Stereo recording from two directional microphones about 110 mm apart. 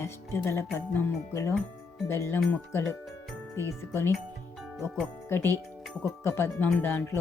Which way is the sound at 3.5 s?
25° left (ahead or behind).